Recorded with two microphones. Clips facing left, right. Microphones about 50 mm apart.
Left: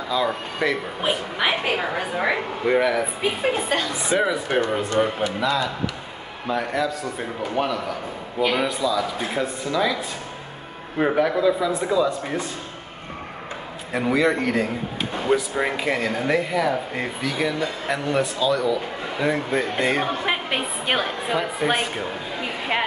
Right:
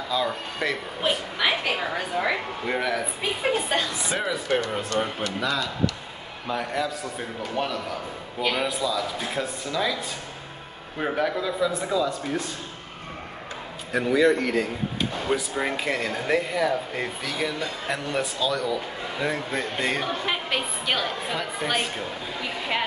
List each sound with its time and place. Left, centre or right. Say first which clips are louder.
0.1 s speech: left 3 dB; centre
5.4 s speech: left 1 dB; centre
13.9 s a woman's voice: even; centre
21.4 s speech: left 5 dB; centre